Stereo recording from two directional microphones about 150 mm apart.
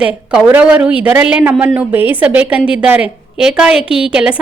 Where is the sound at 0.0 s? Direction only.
10° right (ahead or behind).